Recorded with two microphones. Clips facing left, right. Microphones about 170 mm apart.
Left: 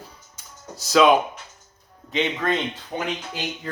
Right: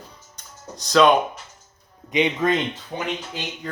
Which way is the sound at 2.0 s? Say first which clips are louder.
Right 4 dB; 15° right (ahead or behind).